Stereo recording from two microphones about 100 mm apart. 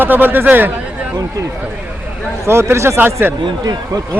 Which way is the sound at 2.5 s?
25° right (ahead or behind).